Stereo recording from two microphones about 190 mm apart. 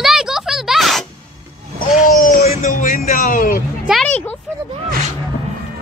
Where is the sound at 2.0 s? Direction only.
45° left (ahead or behind).